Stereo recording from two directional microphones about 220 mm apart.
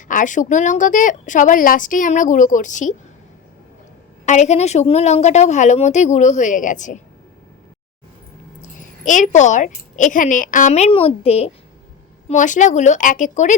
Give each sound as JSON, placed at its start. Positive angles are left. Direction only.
{"t": 0.1, "sound": "a woman's voice", "side_deg": 35}
{"t": 4.3, "sound": "a woman's voice", "side_deg": 30}
{"t": 8.8, "sound": "a woman's voice", "side_deg": 35}